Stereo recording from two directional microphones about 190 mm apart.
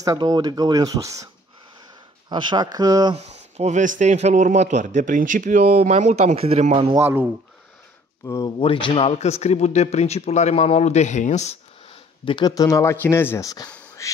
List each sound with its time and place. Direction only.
0.0 s speech: 20° right (ahead or behind)
3.2 s speech: 35° right (ahead or behind)
7.0 s speech: 10° right (ahead or behind)
8.3 s a man's voice: 20° left (ahead or behind); by 11.5 s 40° left (ahead or behind)
12.3 s speech: 20° left (ahead or behind)
13.7 s a sound: 10° left (ahead or behind)